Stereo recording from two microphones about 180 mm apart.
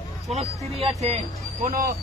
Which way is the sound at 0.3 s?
35° right (ahead or behind).